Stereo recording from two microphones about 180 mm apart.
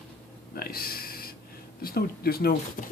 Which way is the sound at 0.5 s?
55° left (ahead or behind).